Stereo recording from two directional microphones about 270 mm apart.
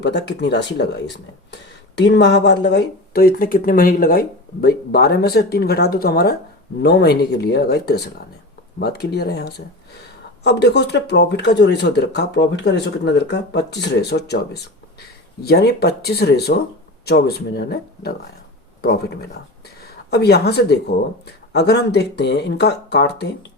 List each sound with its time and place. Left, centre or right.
0.0 s speech: left